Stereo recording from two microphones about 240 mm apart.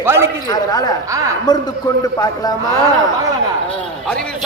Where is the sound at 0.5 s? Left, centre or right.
Centre.